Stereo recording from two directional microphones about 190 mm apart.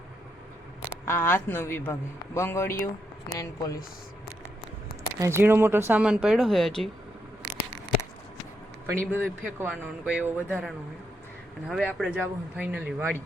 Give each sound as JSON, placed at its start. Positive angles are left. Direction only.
{"t": 1.0, "sound": "a man's voice", "side_deg": 10}
{"t": 2.7, "sound": "speech", "side_deg": 50}
{"t": 3.3, "sound": "a man's voice", "side_deg": 15}
{"t": 5.2, "sound": "speech", "side_deg": -15}
{"t": 9.0, "sound": "a man's voice", "side_deg": 10}
{"t": 9.6, "sound": "speech", "side_deg": -5}
{"t": 11.7, "sound": "speech", "side_deg": 0}